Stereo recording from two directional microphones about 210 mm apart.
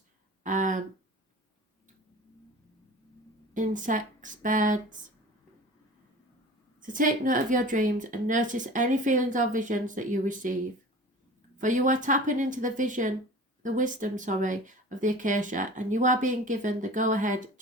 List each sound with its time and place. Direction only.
0.4 s a sound: 35° right (ahead or behind)
3.5 s speech: 35° right (ahead or behind)
6.8 s speech: 40° right (ahead or behind)